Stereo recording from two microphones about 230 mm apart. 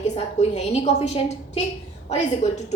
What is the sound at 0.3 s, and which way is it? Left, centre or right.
A woman's voice, left.